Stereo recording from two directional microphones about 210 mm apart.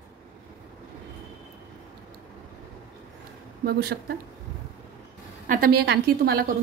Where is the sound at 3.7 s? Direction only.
50° right (ahead or behind).